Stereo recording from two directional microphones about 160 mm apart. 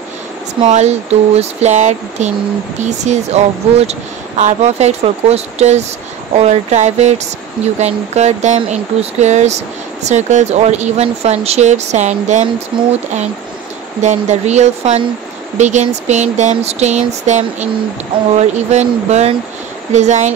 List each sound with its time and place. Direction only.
0.7 s speech: 45° right (ahead or behind)
14.0 s speech: 45° right (ahead or behind)